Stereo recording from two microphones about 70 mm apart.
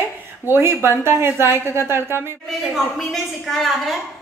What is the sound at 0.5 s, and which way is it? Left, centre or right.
A woman's voice, right.